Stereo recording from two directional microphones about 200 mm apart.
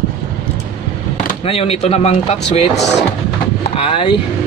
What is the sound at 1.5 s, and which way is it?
Speech, 30° left (ahead or behind).